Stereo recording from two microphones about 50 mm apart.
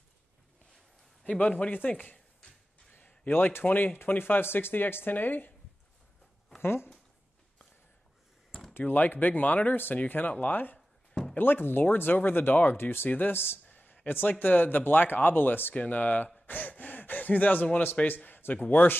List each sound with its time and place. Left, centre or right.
1.4 s speech: left
6.6 s speech: left
8.7 s speech: left
13.7 s a sound: left
14.0 s speech: left
15.7 s speech: left